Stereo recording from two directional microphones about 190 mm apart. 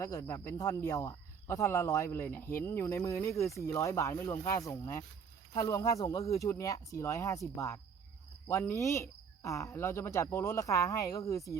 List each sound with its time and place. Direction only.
0.0 s speech: 15° left (ahead or behind)